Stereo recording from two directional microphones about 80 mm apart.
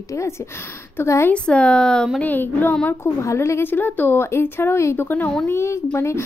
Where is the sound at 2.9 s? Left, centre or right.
Left.